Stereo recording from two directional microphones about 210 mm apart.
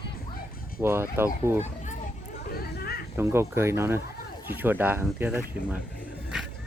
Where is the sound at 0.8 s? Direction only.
10° right (ahead or behind).